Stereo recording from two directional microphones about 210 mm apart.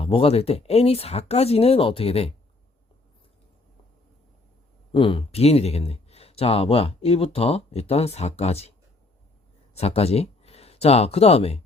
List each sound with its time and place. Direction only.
0.0 s speech: 25° left (ahead or behind)
4.9 s speech: 25° left (ahead or behind)
9.7 s speech: 30° left (ahead or behind)